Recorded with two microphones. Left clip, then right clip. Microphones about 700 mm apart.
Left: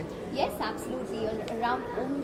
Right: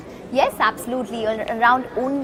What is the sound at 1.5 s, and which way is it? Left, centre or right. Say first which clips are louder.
Speech: right 15 dB; right.